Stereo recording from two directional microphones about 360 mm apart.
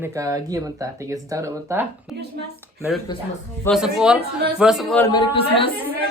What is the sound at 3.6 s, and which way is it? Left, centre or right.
Speech, centre.